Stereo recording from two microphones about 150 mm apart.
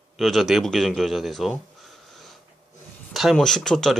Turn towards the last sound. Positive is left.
turn(degrees=5)  # may be behind; listen again after turning